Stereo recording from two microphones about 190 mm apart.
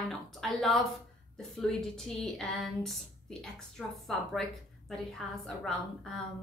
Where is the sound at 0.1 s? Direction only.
Centre (ahead or behind).